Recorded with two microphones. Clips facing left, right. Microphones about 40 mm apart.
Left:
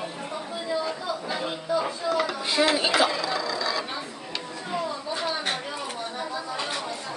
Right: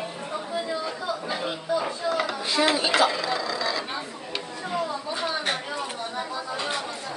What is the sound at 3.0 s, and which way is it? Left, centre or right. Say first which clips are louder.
Speech: right 1 dB; centre.